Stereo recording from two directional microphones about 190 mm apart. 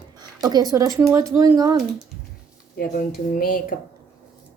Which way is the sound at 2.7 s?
50° left (ahead or behind).